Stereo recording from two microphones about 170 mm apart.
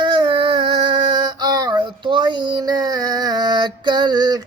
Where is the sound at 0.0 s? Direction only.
30° right (ahead or behind).